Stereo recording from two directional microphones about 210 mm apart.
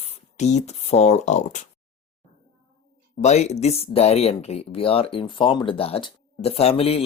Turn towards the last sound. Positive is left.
turn(degrees=30)  # may be behind; listen again after turning